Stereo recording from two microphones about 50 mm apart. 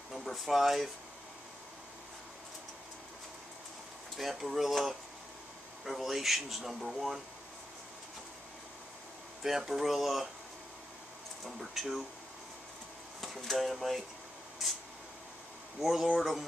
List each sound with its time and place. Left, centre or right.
0.1 s speech: centre
4.2 s speech: centre
9.4 s speech: centre
11.8 s speech: centre
13.2 s speech: centre
15.8 s speech: centre